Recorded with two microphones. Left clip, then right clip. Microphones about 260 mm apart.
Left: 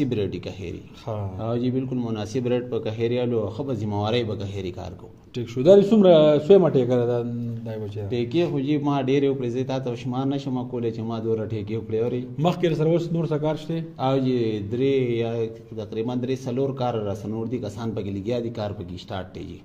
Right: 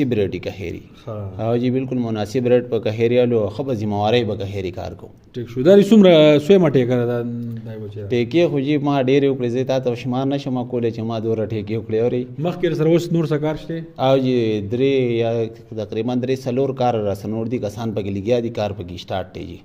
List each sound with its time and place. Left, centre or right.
0.0 s a man's voice: right
1.4 s a man's voice: right
12.4 s a man's voice: centre
12.7 s a man's voice: right